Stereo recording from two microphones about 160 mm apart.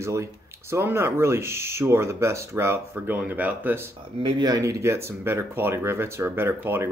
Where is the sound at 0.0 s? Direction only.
20° right (ahead or behind).